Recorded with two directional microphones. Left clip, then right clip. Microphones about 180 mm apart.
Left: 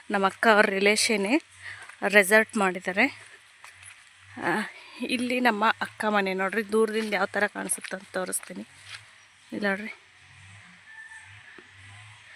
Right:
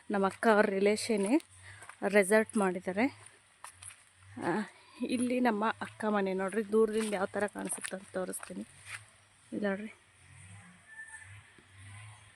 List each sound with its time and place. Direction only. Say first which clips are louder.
0.1 s speech: left 7 dB; 5° left (ahead or behind)
4.4 s speech: left 7 dB; centre (ahead or behind)
8.9 s speech: left 2 dB; 20° left (ahead or behind)
9.6 s speech: left 7 dB; 10° left (ahead or behind)